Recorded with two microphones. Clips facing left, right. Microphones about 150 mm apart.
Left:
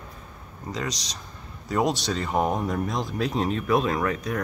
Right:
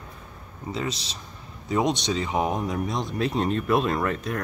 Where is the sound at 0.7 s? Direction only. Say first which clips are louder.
Right 1 dB; 5° right (ahead or behind).